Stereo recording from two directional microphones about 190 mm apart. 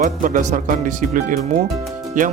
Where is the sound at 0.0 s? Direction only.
40° right (ahead or behind).